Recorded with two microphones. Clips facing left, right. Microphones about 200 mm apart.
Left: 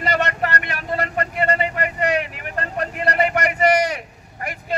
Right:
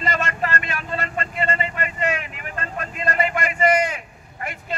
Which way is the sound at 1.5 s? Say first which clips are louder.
Left 4 dB; 65° left (ahead or behind).